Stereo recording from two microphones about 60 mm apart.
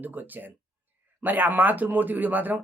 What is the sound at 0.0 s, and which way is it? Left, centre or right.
Speech, right.